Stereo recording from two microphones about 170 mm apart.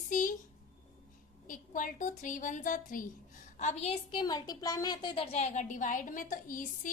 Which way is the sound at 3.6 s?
40° left (ahead or behind).